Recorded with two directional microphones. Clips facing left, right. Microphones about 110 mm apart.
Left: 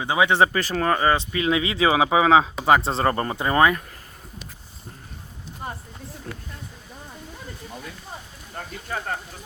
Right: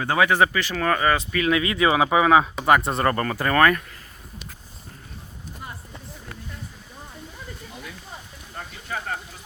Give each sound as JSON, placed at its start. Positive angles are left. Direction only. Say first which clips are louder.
{"t": 0.0, "sound": "speech", "louder": "even", "side_deg": 15}
{"t": 0.3, "sound": "speech", "louder": "left 1 dB", "side_deg": 25}
{"t": 5.6, "sound": "a sound", "louder": "left 6 dB", "side_deg": 40}